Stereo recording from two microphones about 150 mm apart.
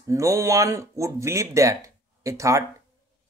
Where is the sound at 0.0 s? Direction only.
20° right (ahead or behind).